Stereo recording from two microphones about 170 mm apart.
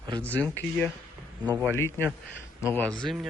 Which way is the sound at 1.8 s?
10° left (ahead or behind).